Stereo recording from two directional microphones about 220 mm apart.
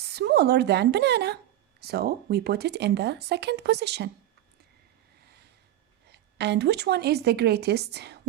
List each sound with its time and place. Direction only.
0.0 s a woman's voice: 50° right (ahead or behind)
6.1 s speech: 50° right (ahead or behind)